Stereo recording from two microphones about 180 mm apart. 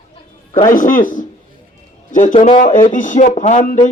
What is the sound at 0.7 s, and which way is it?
A man's voice, 50° left (ahead or behind).